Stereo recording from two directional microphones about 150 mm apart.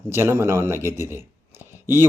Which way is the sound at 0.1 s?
15° right (ahead or behind).